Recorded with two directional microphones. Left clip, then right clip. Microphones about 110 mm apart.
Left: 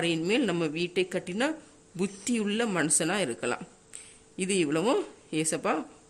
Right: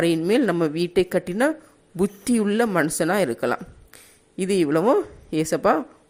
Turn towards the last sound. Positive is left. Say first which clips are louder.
# right 9 dB
turn(degrees=-40)  # may be behind; listen again after turning